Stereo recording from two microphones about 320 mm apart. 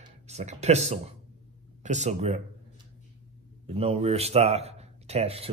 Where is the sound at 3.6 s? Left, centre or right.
Centre.